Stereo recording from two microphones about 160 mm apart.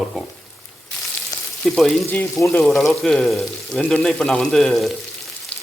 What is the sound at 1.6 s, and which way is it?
Speech, centre (ahead or behind).